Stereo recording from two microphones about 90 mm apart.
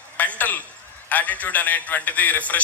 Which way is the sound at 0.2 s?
20° left (ahead or behind).